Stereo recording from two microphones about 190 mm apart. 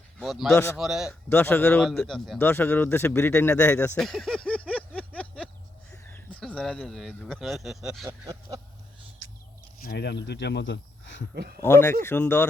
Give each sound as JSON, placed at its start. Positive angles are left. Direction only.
{"t": 0.2, "sound": "speech", "side_deg": 0}
{"t": 1.3, "sound": "a man's voice", "side_deg": 10}
{"t": 8.3, "sound": "a sound", "side_deg": -20}
{"t": 9.8, "sound": "speech", "side_deg": 60}
{"t": 11.6, "sound": "a man's voice", "side_deg": 15}